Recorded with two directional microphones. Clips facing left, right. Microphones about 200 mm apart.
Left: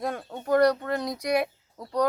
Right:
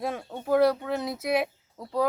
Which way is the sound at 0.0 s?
5° right (ahead or behind).